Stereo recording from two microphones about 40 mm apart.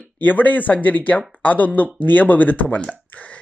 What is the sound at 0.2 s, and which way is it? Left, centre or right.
Speech, left.